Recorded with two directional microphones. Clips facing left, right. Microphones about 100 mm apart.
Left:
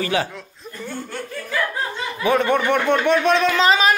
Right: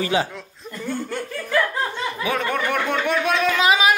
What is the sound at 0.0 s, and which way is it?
Speech, 20° right (ahead or behind).